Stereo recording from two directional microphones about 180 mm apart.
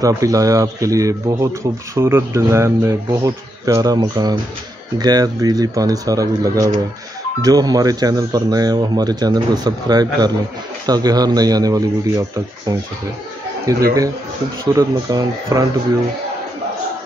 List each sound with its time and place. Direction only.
0.0 s speech: 20° right (ahead or behind)